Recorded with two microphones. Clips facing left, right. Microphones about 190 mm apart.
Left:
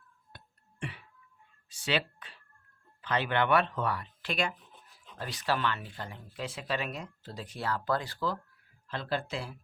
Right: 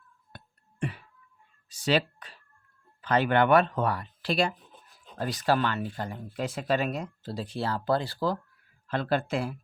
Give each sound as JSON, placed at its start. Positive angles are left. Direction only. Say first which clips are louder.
{"t": 0.3, "sound": "music", "louder": "right 8 dB", "side_deg": -40}
{"t": 1.7, "sound": "a sound", "louder": "right 6 dB", "side_deg": -40}
{"t": 3.0, "sound": "speech", "louder": "right 6 dB", "side_deg": -45}
{"t": 8.9, "sound": "speech", "louder": "right 7 dB", "side_deg": -55}